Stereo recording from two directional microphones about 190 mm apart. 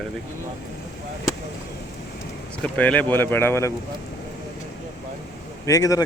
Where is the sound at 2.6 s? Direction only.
5° left (ahead or behind).